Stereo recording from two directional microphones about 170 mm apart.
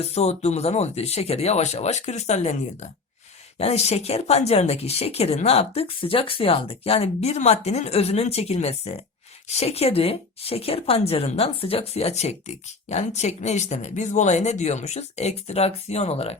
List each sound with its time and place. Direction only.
0.0 s speech: 40° left (ahead or behind)